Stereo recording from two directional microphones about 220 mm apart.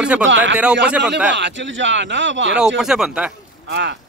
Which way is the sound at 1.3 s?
55° right (ahead or behind).